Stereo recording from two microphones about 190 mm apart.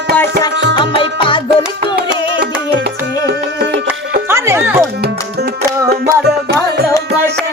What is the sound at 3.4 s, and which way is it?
Music, 65° right (ahead or behind).